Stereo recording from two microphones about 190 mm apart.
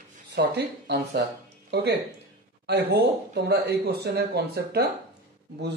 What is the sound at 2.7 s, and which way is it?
Speech, 60° right (ahead or behind).